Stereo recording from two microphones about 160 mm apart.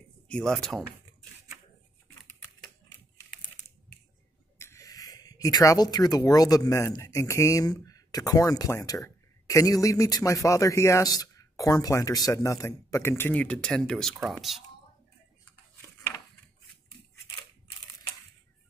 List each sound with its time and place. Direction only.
0.3 s speech: 5° left (ahead or behind)
4.6 s speech: 15° left (ahead or behind); by 14.6 s centre (ahead or behind)